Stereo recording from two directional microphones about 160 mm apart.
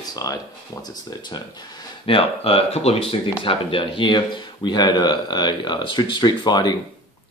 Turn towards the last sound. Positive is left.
turn(degrees=25)  # may be behind; listen again after turning